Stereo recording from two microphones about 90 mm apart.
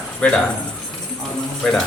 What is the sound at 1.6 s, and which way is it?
Speech, 5° left (ahead or behind).